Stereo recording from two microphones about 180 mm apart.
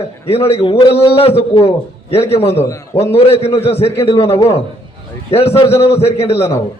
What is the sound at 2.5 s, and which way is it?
Speech, 15° left (ahead or behind).